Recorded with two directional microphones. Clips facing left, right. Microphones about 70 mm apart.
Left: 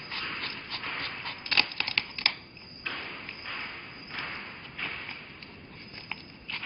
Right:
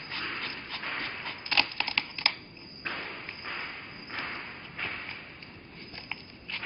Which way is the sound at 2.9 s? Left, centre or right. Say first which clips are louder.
Right 1 dB; right.